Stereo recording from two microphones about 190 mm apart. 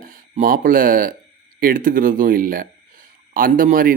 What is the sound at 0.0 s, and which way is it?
A man's voice, 45° right (ahead or behind).